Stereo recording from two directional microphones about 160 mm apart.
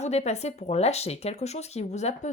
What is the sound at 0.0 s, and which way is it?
Speech, 45° left (ahead or behind).